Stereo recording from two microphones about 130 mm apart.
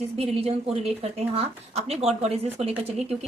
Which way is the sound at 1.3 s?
50° right (ahead or behind).